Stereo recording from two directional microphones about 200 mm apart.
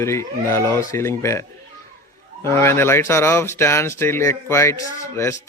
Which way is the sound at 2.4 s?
10° left (ahead or behind).